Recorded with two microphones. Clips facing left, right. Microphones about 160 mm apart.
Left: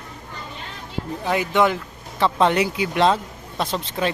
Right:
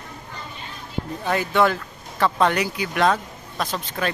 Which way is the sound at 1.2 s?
15° left (ahead or behind).